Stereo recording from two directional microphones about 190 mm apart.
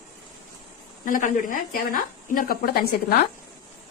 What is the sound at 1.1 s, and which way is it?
Speech, 45° left (ahead or behind).